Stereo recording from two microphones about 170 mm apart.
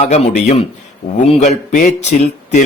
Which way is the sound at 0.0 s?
40° left (ahead or behind).